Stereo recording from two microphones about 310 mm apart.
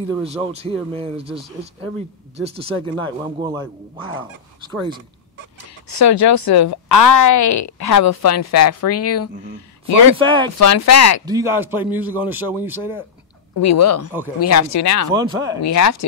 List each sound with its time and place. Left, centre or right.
0.1 s speech: centre
5.9 s speech: left
10.1 s speech: centre
10.6 s speech: left
11.2 s speech: centre
13.6 s speech: left
15.0 s speech: centre
15.6 s speech: left